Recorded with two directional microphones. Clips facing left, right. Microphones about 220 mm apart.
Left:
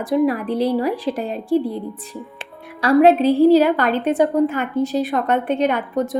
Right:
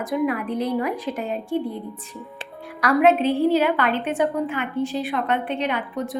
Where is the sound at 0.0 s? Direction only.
35° left (ahead or behind).